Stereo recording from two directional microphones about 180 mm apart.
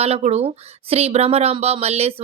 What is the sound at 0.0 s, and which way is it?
Speech, 35° right (ahead or behind).